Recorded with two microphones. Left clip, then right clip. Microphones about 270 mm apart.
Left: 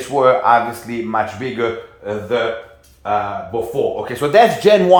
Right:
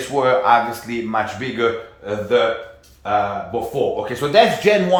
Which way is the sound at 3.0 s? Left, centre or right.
Centre.